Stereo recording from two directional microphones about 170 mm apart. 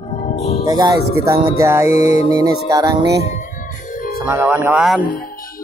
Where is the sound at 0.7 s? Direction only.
25° right (ahead or behind).